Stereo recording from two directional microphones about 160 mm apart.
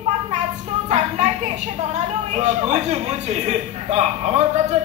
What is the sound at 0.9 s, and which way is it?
A woman's voice, 45° right (ahead or behind).